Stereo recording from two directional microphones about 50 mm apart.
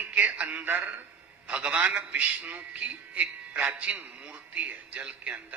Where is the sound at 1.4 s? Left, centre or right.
Right.